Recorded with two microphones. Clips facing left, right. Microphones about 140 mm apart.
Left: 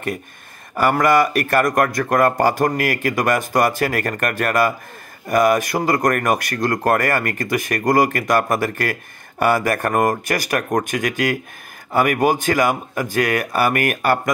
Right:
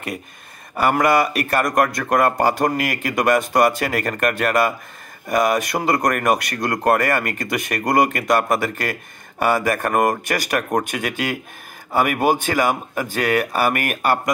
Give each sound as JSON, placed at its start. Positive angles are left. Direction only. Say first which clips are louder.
{"t": 0.7, "sound": "a man's voice", "louder": "left 1 dB", "side_deg": 45}